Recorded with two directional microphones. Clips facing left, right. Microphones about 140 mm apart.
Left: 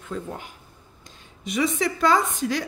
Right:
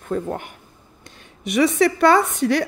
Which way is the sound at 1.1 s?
70° right (ahead or behind).